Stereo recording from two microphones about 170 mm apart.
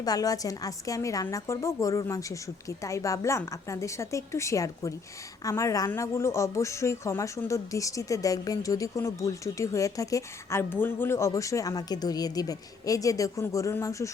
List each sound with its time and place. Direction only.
0.0 s a woman's voice: 20° left (ahead or behind)